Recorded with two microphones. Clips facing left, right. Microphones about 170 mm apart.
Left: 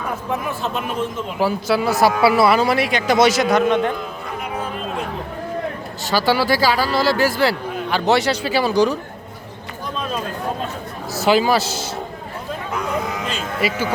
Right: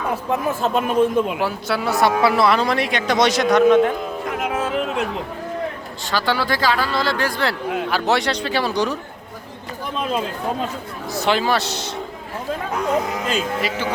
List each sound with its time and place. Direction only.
0.6 s speech: 50° right (ahead or behind)
1.4 s speech: centre (ahead or behind)
4.3 s a sound: 90° right
6.1 s speech: 5° left (ahead or behind)
11.1 s speech: 5° left (ahead or behind)
13.6 s speech: 10° left (ahead or behind)